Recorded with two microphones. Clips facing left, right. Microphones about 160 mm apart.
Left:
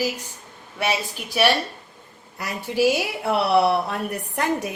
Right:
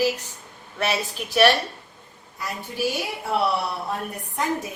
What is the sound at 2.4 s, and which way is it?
A woman's voice, 75° left (ahead or behind).